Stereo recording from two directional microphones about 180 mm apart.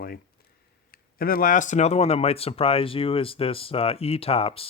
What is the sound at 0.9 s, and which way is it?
Speech, 55° left (ahead or behind).